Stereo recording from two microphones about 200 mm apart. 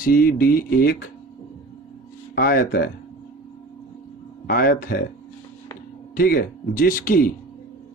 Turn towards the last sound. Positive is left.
turn(degrees=45)  # may be behind; listen again after turning